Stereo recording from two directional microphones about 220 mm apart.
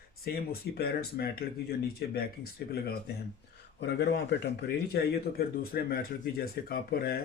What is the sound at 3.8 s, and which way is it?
Speech, 50° left (ahead or behind).